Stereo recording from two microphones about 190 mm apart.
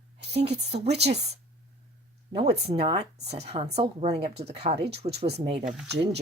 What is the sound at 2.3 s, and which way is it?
Speech, 30° right (ahead or behind).